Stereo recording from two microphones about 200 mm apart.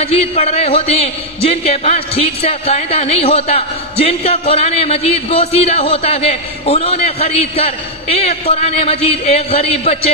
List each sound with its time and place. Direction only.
0.0 s a man's voice: 30° left (ahead or behind)